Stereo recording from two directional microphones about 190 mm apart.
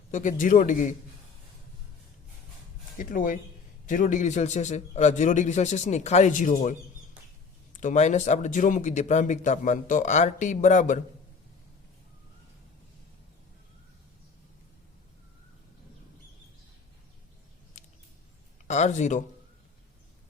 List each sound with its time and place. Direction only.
0.1 s a man's voice: 40° left (ahead or behind)
3.0 s a man's voice: 45° left (ahead or behind)
17.8 s a sound: 40° left (ahead or behind)
18.7 s speech: 40° left (ahead or behind)